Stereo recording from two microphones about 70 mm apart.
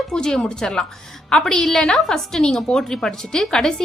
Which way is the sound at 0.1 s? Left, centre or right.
Centre.